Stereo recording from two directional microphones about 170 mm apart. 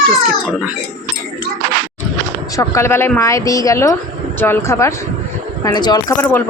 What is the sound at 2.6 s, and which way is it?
Speech, 15° left (ahead or behind).